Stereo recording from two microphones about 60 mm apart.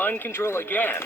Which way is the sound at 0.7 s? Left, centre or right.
Left.